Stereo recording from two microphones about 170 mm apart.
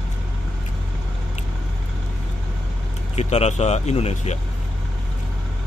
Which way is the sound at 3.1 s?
40° left (ahead or behind).